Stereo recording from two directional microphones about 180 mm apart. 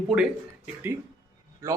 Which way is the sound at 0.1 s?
5° right (ahead or behind).